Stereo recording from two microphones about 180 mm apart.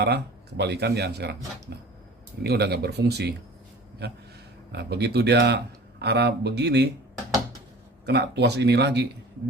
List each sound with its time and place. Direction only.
0.0 s speech: 70° right (ahead or behind)
8.0 s speech: 70° right (ahead or behind)